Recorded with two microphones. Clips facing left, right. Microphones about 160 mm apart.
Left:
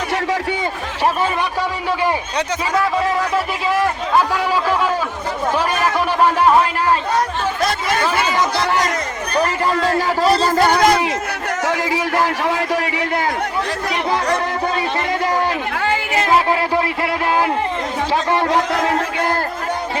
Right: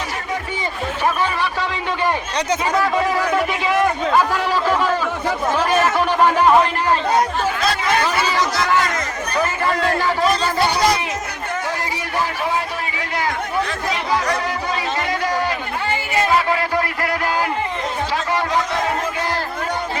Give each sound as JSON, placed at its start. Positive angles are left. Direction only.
{"t": 3.3, "sound": "a man's voice", "side_deg": 0}
{"t": 9.8, "sound": "speech", "side_deg": 40}
{"t": 11.7, "sound": "a man's voice", "side_deg": 90}